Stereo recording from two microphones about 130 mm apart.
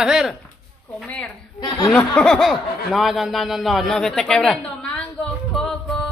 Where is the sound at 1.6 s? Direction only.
35° left (ahead or behind).